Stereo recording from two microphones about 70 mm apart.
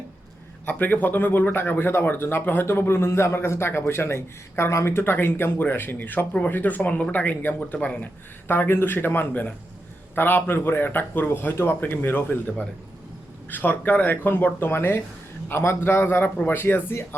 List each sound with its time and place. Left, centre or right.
0.6 s speech: left
8.4 s speech: left
13.5 s speech: left